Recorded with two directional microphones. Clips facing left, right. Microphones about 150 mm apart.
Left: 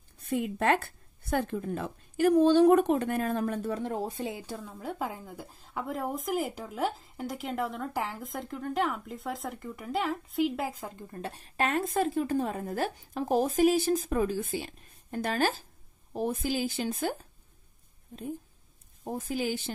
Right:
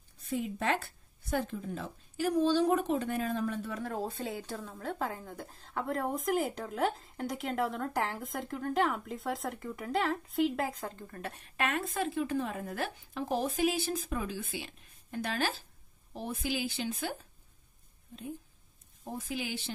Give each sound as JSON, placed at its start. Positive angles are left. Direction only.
{"t": 0.3, "sound": "a woman's voice", "side_deg": 55}
{"t": 3.7, "sound": "a woman's voice", "side_deg": 20}
{"t": 11.1, "sound": "a woman's voice", "side_deg": 25}
{"t": 19.1, "sound": "a woman's voice", "side_deg": 45}